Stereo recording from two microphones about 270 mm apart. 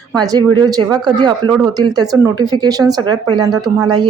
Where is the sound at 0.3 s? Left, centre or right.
Centre.